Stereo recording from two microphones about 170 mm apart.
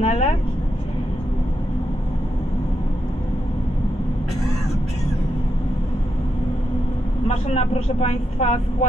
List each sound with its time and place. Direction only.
0.0 s speech: 40° left (ahead or behind)
7.2 s speech: 40° left (ahead or behind)